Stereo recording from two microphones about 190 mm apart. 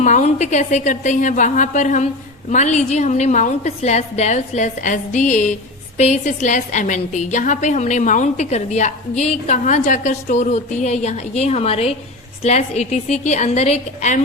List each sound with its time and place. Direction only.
0.0 s a woman's voice: 40° left (ahead or behind)